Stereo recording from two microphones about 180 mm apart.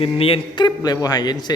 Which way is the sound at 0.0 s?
30° left (ahead or behind).